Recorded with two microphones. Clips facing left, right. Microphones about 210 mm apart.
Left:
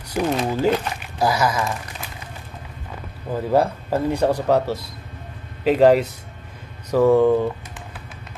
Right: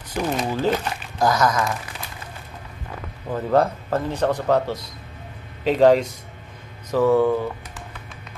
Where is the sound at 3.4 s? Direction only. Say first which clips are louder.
Even; 10° left (ahead or behind).